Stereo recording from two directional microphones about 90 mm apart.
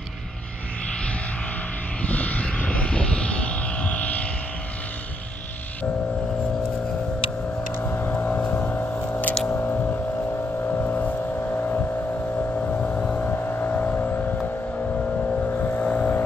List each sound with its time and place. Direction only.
2.0 s vehicle: 15° left (ahead or behind)
7.8 s vehicle: 20° left (ahead or behind)
9.5 s a sound: 20° left (ahead or behind)
10.6 s vehicle: 20° left (ahead or behind)
15.4 s vehicle: 20° left (ahead or behind)